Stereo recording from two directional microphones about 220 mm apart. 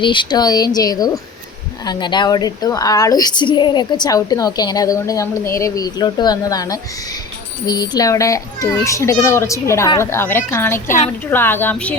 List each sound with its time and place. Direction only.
0.0 s a woman's voice: 20° left (ahead or behind)